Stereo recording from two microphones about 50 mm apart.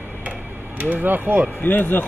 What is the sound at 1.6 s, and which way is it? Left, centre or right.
Speech, left.